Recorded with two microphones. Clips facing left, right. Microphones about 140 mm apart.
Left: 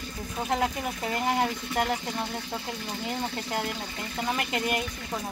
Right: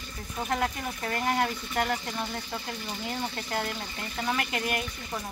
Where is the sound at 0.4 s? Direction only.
15° left (ahead or behind).